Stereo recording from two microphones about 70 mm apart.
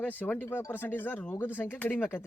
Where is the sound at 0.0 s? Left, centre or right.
Left.